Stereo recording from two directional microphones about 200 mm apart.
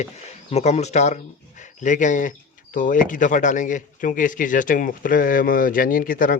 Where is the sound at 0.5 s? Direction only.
35° left (ahead or behind).